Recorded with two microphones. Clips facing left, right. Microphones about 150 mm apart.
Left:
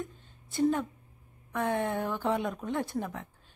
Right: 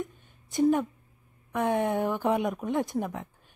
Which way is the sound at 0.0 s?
15° right (ahead or behind).